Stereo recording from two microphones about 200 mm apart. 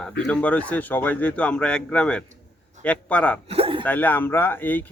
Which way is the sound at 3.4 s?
30° right (ahead or behind).